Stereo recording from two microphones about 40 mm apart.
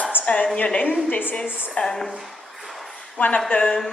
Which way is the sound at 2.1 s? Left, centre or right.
Centre.